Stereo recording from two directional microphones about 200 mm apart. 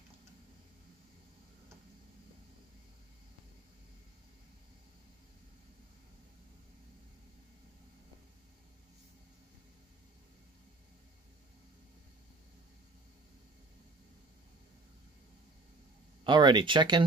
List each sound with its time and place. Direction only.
16.3 s speech: 25° right (ahead or behind)